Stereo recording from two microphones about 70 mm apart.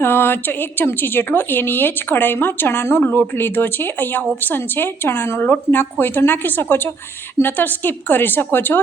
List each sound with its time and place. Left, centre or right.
0.0 s a woman's voice: left